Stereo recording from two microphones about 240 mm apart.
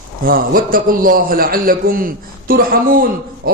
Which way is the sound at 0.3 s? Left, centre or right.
Right.